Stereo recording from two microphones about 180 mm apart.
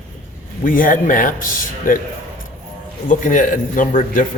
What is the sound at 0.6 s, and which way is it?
Speech, 50° left (ahead or behind).